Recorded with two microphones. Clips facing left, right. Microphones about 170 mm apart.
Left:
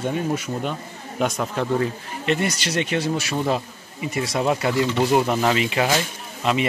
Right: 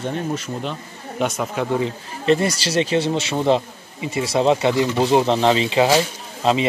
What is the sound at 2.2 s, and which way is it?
A man's voice, 35° right (ahead or behind).